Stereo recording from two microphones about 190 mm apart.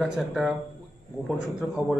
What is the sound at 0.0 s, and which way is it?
Speech, centre (ahead or behind).